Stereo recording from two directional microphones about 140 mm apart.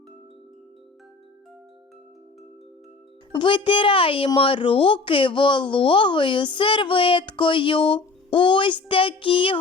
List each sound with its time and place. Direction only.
3.3 s speech: 35° left (ahead or behind)